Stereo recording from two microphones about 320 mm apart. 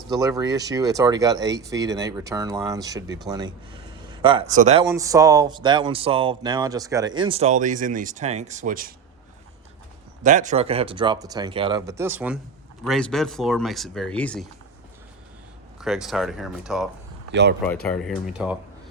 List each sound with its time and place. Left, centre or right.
0.1 s speech: centre
10.2 s speech: right; by 14.4 s centre
15.8 s speech: centre